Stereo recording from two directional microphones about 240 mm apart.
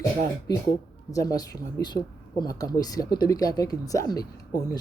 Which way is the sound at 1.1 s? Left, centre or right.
Centre.